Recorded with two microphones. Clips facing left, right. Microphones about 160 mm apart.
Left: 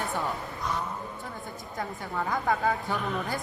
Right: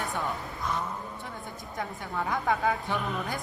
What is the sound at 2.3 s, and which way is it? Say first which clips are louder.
Speech: even; centre (ahead or behind).